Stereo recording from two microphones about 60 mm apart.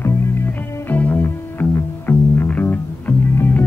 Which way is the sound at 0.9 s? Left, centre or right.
Left.